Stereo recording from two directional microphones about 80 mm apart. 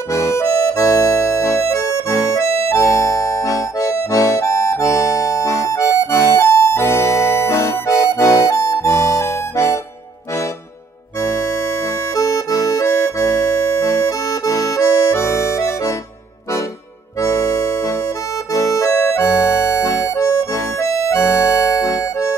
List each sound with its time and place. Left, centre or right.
0.1 s accordion: left
11.1 s accordion: left
17.2 s accordion: left